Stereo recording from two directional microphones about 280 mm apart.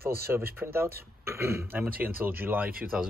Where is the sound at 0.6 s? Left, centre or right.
Centre.